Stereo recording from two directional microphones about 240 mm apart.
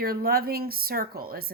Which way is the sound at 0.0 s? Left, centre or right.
Right.